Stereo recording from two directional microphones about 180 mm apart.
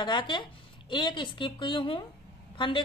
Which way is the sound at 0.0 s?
25° left (ahead or behind).